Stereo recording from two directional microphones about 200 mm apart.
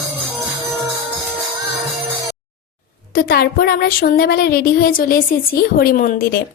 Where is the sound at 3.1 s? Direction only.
50° left (ahead or behind).